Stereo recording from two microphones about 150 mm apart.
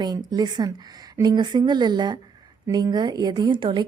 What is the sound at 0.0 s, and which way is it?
A woman's voice, 25° right (ahead or behind).